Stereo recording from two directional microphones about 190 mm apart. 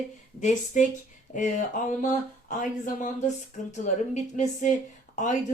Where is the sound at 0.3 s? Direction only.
40° left (ahead or behind).